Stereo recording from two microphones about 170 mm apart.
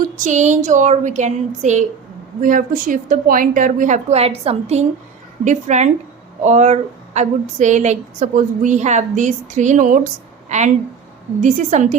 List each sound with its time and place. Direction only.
0.2 s speech: 45° right (ahead or behind)